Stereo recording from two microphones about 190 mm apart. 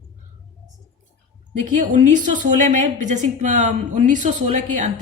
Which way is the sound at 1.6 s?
40° right (ahead or behind).